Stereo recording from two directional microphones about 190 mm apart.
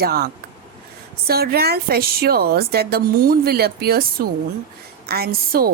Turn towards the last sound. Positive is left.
turn(degrees=-55)  # may be behind; listen again after turning